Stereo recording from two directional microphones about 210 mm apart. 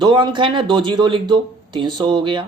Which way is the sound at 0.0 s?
20° right (ahead or behind).